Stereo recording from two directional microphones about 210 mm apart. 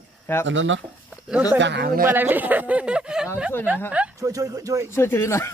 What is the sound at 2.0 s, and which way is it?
Speech, 10° right (ahead or behind).